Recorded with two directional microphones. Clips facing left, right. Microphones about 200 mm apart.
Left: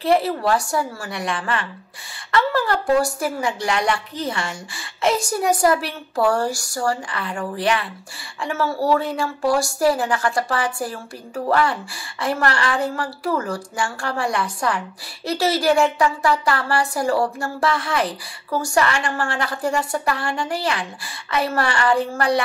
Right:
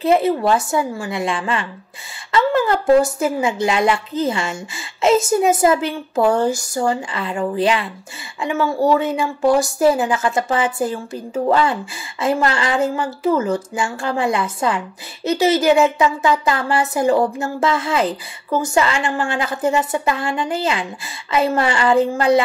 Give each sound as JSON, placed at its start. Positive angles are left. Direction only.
{"t": 0.0, "sound": "a woman's voice", "side_deg": -20}